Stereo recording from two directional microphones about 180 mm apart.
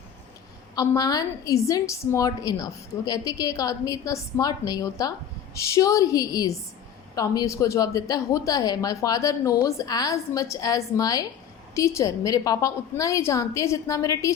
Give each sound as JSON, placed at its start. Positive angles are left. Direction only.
{"t": 0.8, "sound": "a woman's voice", "side_deg": 20}